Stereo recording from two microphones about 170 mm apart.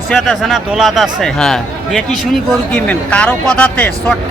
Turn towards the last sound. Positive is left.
turn(degrees=10)  # may be behind; listen again after turning